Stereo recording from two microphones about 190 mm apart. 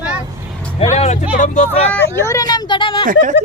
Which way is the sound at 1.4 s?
40° left (ahead or behind).